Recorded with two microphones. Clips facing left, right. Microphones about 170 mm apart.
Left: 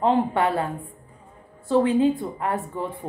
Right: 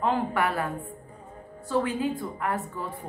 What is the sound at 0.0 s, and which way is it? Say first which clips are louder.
Speech: left 5 dB; 25° left (ahead or behind).